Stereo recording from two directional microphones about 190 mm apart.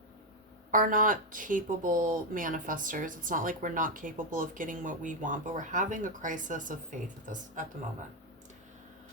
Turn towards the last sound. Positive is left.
turn(degrees=-45)  # may be behind; listen again after turning